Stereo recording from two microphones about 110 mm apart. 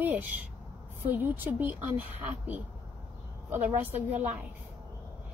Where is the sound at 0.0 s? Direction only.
15° right (ahead or behind).